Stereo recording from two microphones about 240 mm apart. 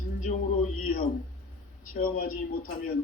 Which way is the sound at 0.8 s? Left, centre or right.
Left.